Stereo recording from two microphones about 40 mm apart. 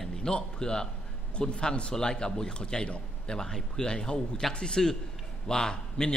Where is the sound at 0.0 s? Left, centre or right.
Centre.